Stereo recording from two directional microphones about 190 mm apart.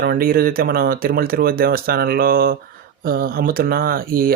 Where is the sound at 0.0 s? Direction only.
50° right (ahead or behind).